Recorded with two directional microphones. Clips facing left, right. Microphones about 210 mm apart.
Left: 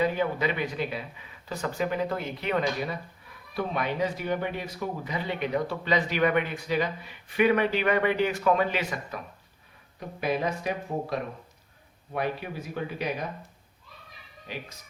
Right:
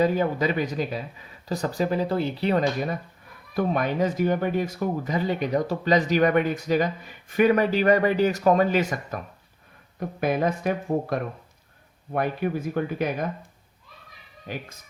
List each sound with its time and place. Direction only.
0.0 s speech: 40° right (ahead or behind)
14.4 s speech: 50° right (ahead or behind)